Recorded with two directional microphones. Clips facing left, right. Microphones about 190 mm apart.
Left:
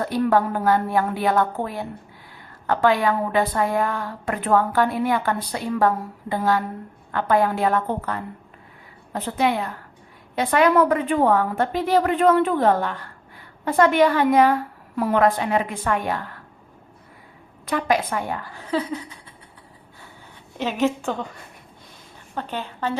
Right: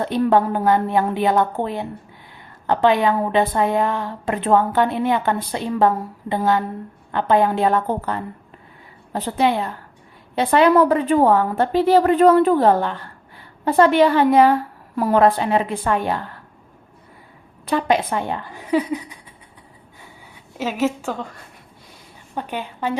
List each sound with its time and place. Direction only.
0.0 s a woman's voice: 25° right (ahead or behind)
17.7 s a woman's voice: 25° right (ahead or behind)
20.6 s a woman's voice: 5° right (ahead or behind)
22.4 s a woman's voice: 15° right (ahead or behind)